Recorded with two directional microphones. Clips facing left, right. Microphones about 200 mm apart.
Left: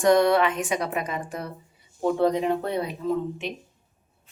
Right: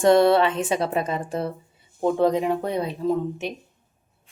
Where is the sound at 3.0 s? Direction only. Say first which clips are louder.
Right 3 dB; 35° right (ahead or behind).